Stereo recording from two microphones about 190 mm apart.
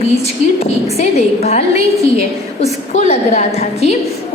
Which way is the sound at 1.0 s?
35° left (ahead or behind).